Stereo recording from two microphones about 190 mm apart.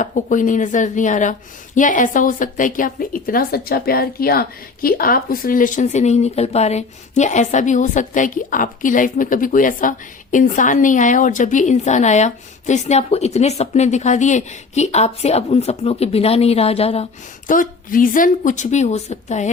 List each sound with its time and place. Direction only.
0.0 s a woman's voice: 40° left (ahead or behind)
17.5 s a woman's voice: 45° left (ahead or behind)